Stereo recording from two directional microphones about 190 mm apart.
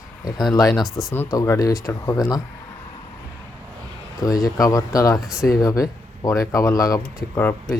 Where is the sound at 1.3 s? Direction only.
15° left (ahead or behind).